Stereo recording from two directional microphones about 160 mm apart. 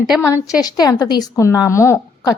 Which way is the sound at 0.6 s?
25° left (ahead or behind).